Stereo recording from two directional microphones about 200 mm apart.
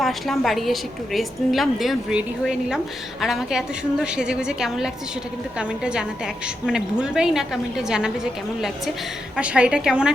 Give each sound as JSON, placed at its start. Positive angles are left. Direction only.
{"t": 0.0, "sound": "a woman's voice", "side_deg": 0}